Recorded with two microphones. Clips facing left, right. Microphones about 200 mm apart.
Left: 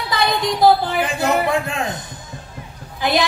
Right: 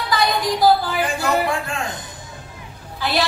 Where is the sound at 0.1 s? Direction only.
20° left (ahead or behind).